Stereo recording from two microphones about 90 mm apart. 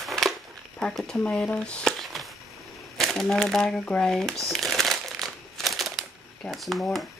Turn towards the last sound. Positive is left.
turn(degrees=0)  # may be behind; listen again after turning